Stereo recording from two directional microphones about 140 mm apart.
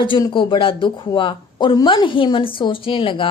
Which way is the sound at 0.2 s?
35° left (ahead or behind).